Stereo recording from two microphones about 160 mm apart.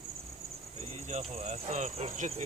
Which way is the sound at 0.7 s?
40° right (ahead or behind).